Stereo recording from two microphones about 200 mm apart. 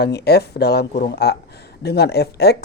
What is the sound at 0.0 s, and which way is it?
Speech, 55° left (ahead or behind).